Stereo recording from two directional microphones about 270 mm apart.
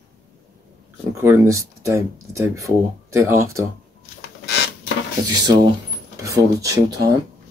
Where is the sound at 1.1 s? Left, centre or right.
Centre.